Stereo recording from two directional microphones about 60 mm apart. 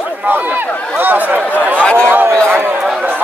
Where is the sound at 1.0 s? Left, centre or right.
Right.